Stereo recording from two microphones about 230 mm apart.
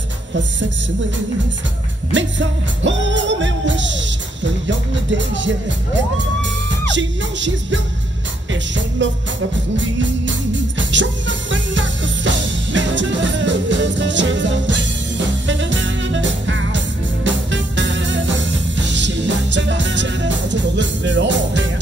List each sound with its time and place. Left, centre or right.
0.3 s music: right
2.1 s music: right
6.9 s music: right
9.0 s music: right
10.8 s music: right